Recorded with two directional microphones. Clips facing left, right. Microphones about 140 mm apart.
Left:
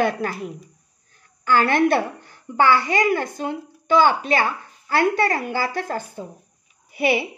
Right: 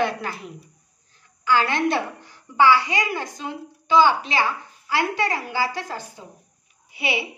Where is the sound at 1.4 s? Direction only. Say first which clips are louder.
Left 3 dB; 50° left (ahead or behind).